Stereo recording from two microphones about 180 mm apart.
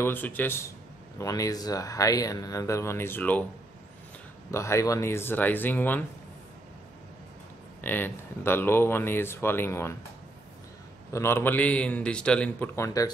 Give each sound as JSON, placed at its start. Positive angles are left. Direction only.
{"t": 0.0, "sound": "speech", "side_deg": 10}
{"t": 4.5, "sound": "speech", "side_deg": 15}
{"t": 7.8, "sound": "speech", "side_deg": 10}
{"t": 11.1, "sound": "speech", "side_deg": 15}